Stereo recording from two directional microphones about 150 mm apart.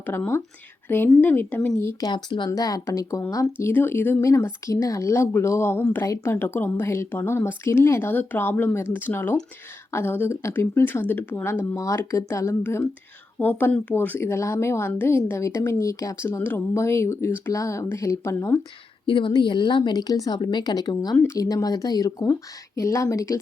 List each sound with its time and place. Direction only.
0.0 s speech: 15° left (ahead or behind)
19.0 s speech: 35° left (ahead or behind)